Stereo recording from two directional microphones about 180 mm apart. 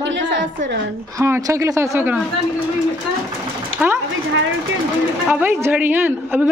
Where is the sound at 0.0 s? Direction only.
80° right.